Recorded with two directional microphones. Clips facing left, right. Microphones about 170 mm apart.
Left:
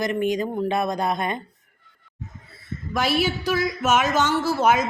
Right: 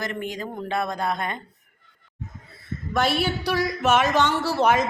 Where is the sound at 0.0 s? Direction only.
15° left (ahead or behind).